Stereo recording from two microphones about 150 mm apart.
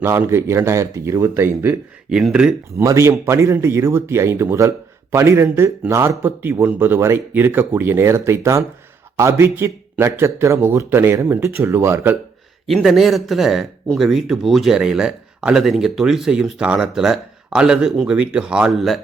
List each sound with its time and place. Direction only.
0.0 s speech: 15° right (ahead or behind)
2.0 s speech: 5° right (ahead or behind)
2.7 s speech: 20° right (ahead or behind)
12.6 s speech: centre (ahead or behind)